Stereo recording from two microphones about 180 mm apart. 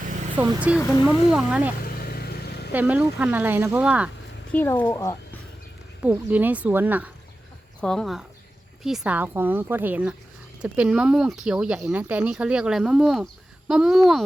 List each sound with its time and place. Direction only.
0.4 s speech: 10° right (ahead or behind)
1.8 s vehicle: 60° left (ahead or behind)
2.7 s speech: 5° right (ahead or behind)
4.5 s speech: 10° left (ahead or behind)
6.0 s speech: 10° right (ahead or behind)
7.8 s speech: 5° left (ahead or behind)